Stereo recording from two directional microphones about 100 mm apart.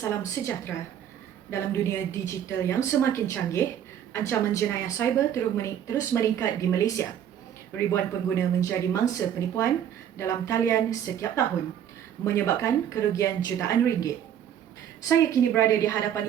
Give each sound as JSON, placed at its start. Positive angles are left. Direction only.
{"t": 0.0, "sound": "a woman's voice", "side_deg": 25}